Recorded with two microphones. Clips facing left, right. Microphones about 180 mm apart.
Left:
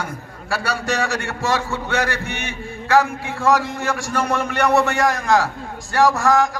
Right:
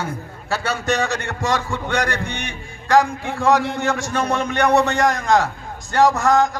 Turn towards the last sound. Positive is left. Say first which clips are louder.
# even
turn(degrees=-20)  # may be behind; listen again after turning